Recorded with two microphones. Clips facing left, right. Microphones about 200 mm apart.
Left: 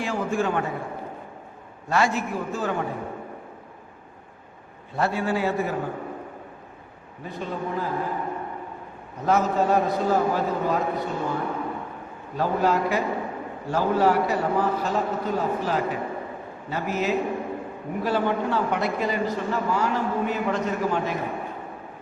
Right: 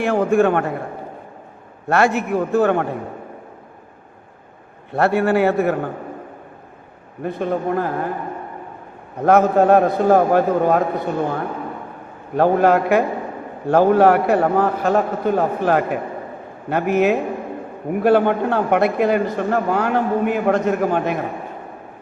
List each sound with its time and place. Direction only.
0.0 s a man's voice: 60° right (ahead or behind)
1.9 s a man's voice: 65° right (ahead or behind)
4.9 s a man's voice: 65° right (ahead or behind)
7.2 s a man's voice: 60° right (ahead or behind)
9.1 s a man's voice: 60° right (ahead or behind)